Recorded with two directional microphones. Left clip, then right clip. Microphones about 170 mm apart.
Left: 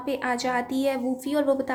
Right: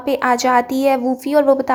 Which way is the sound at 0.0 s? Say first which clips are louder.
Right 11 dB; 30° right (ahead or behind).